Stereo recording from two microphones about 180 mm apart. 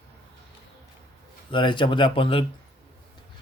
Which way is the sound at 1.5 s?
25° left (ahead or behind).